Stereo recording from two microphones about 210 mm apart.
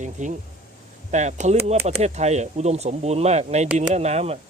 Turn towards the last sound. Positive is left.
turn(degrees=-30)  # may be behind; listen again after turning